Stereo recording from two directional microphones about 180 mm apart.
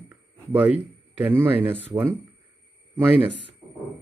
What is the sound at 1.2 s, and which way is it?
Speech, 10° right (ahead or behind).